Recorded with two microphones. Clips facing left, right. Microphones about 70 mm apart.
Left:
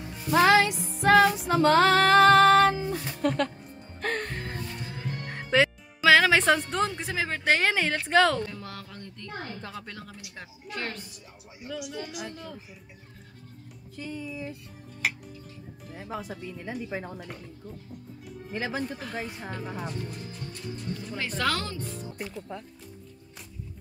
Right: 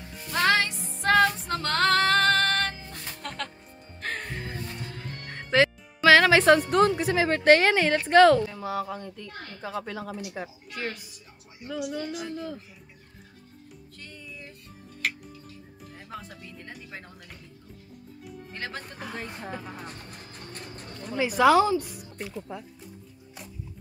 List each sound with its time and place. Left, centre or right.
0.1 s music: centre
8.5 s speech: centre
9.3 s a woman's voice: left
9.6 s speech: centre
12.0 s speech: centre
12.3 s speech: centre
13.9 s speech: centre
15.0 s music: centre
15.9 s speech: centre
17.1 s a woman's voice: left
18.5 s speech: centre
19.9 s speech: right
21.2 s speech: centre